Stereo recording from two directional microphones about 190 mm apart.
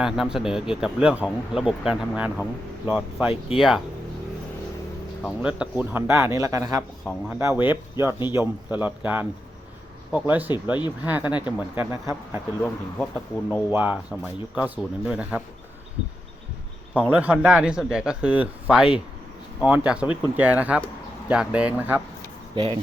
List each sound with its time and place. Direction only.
0.0 s speech: 5° right (ahead or behind)
5.2 s speech: 5° right (ahead or behind)
11.3 s speech: 25° left (ahead or behind)
11.8 s speech: 15° right (ahead or behind)
12.6 s speech: 5° left (ahead or behind)
13.7 s speech: 10° right (ahead or behind)
16.9 s speech: 5° right (ahead or behind)
22.5 s speech: 25° right (ahead or behind)